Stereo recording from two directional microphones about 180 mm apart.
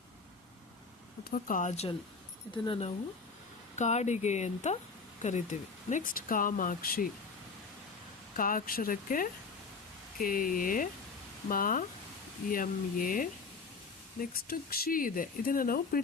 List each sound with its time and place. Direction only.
1.2 s speech: 50° left (ahead or behind)
8.4 s speech: 50° left (ahead or behind)